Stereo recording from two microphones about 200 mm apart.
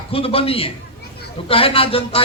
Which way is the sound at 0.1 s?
30° left (ahead or behind).